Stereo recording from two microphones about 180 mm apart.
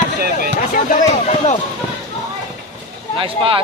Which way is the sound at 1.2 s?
40° left (ahead or behind).